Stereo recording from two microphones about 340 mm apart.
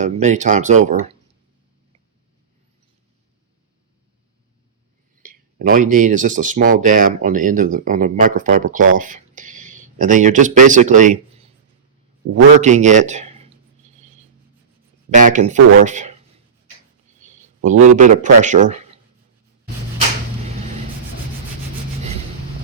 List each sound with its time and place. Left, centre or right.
0.0 s speech: right
5.2 s speech: right
12.5 s speech: right
15.1 s speech: right
17.6 s speech: right